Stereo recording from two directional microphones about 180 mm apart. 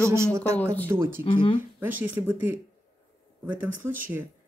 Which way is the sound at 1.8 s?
10° right (ahead or behind).